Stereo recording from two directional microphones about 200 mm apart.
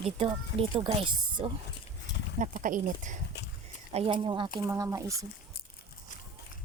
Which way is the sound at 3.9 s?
30° right (ahead or behind).